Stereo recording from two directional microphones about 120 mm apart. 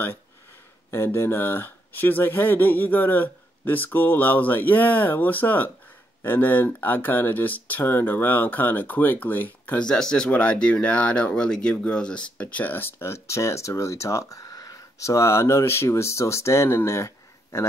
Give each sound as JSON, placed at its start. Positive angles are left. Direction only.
{"t": 0.9, "sound": "speech", "side_deg": 20}